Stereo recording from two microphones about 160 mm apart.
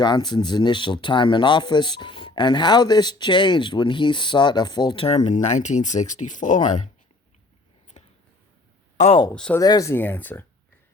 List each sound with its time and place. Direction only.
0.0 s speech: 25° left (ahead or behind); by 6.8 s 50° left (ahead or behind)
9.3 s speech: 5° left (ahead or behind)
9.6 s speech: 20° left (ahead or behind)